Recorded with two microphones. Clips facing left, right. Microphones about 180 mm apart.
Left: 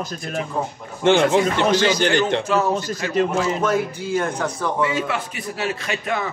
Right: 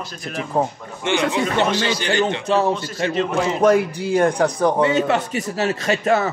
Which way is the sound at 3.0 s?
30° right (ahead or behind).